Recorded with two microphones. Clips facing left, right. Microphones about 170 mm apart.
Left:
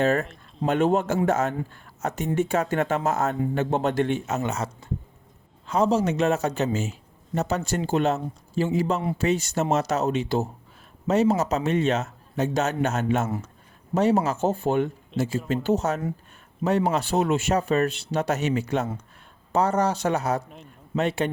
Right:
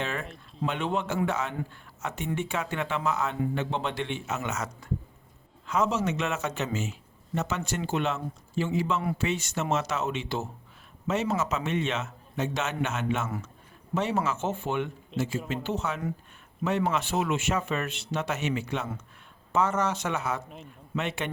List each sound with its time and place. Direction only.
0.0 s speech: 40° left (ahead or behind)